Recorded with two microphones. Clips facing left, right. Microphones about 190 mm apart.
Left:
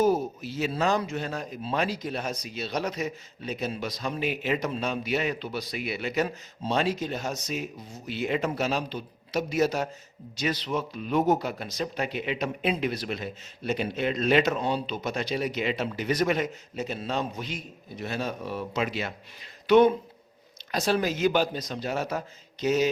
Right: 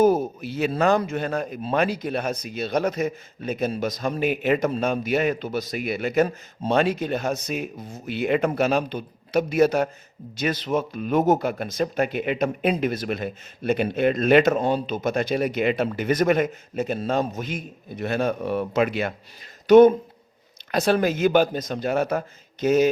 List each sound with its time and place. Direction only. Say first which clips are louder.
0.0 s speech: right 5 dB; 55° right (ahead or behind)
19.6 s speech: right 6 dB; 45° right (ahead or behind)
20.7 s speech: right 5 dB; 55° right (ahead or behind)